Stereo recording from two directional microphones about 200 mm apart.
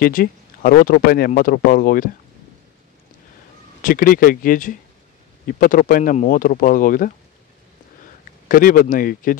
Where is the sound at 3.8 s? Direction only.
45° left (ahead or behind).